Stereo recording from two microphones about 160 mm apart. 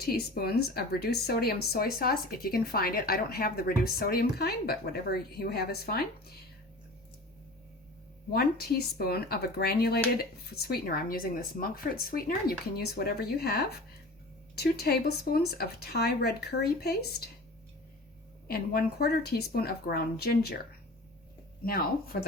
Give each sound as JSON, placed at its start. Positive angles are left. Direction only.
{"t": 0.0, "sound": "speech", "side_deg": 75}
{"t": 8.3, "sound": "speech", "side_deg": 75}
{"t": 14.5, "sound": "speech", "side_deg": 85}
{"t": 18.4, "sound": "speech", "side_deg": 75}
{"t": 21.6, "sound": "speech", "side_deg": 65}